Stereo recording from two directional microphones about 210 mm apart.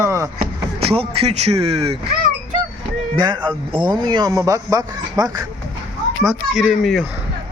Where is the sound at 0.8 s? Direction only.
25° right (ahead or behind).